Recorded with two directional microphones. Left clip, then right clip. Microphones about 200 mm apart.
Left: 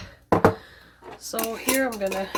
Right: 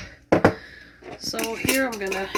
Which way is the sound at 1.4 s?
50° left (ahead or behind).